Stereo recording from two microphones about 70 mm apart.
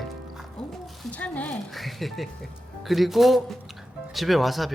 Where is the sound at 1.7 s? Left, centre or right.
Centre.